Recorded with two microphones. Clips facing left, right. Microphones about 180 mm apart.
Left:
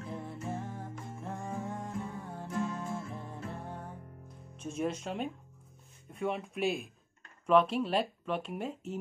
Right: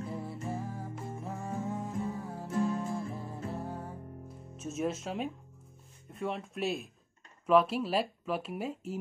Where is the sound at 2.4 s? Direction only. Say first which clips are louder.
Right 4 dB; 25° right (ahead or behind).